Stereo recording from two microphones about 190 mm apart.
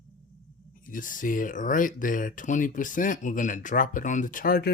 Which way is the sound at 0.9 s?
45° left (ahead or behind).